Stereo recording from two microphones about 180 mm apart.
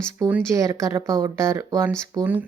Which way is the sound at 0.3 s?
15° right (ahead or behind).